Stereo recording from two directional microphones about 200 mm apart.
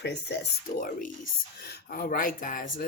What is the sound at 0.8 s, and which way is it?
Speech, 40° left (ahead or behind).